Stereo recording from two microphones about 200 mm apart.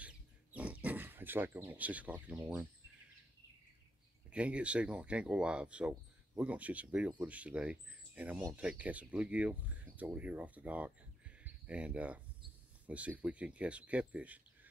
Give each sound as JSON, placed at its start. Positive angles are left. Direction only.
{"t": 0.0, "sound": "pig", "side_deg": -5}
{"t": 0.8, "sound": "speech", "side_deg": -10}
{"t": 4.3, "sound": "speech", "side_deg": -5}